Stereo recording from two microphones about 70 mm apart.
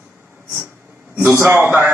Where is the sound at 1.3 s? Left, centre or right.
Right.